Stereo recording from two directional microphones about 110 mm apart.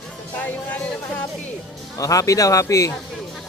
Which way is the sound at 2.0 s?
30° left (ahead or behind).